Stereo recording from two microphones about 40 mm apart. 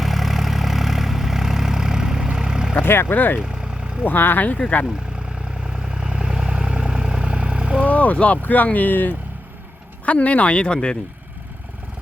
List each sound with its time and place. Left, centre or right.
0.0 s vehicle: centre
2.8 s speech: left
3.2 s speech: left
3.4 s vehicle: right
4.0 s speech: left
5.6 s vehicle: centre
7.9 s speech: left
10.1 s speech: left